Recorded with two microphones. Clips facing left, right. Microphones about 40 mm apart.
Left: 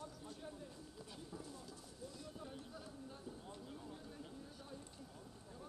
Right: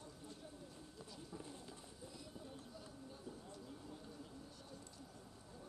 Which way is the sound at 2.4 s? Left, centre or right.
Left.